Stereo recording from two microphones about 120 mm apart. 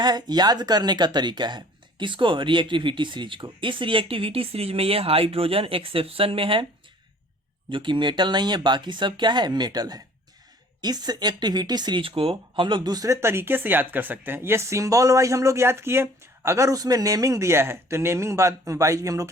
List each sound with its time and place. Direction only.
0.0 s speech: 35° right (ahead or behind)
7.7 s speech: 45° right (ahead or behind); by 19.3 s 25° right (ahead or behind)